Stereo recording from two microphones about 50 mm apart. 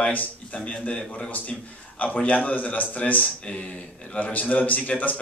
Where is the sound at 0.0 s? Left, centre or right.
Left.